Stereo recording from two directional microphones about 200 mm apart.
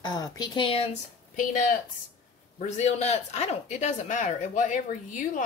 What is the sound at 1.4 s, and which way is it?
A man's voice, 40° left (ahead or behind).